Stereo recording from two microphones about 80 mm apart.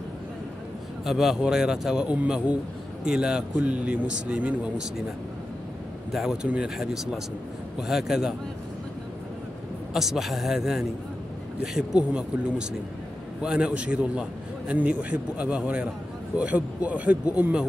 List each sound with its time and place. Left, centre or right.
1.0 s speech: centre
6.1 s a man's voice: centre
9.9 s a man's voice: centre